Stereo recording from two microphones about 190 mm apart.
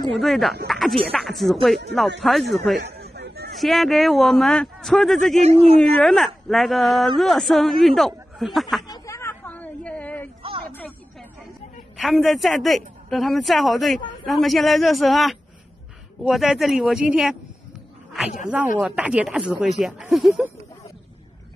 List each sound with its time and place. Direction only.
0.1 s speech: centre (ahead or behind)
3.0 s a sound: 55° right (ahead or behind)
3.5 s speech: centre (ahead or behind)
5.4 s speech: 35° right (ahead or behind)
5.8 s speech: centre (ahead or behind)
8.8 s a sound: 20° left (ahead or behind)
12.0 s speech: centre (ahead or behind)
18.1 s a sound: centre (ahead or behind)
18.8 s speech: 5° right (ahead or behind)